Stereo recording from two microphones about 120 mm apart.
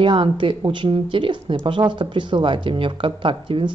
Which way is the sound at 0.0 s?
45° right (ahead or behind).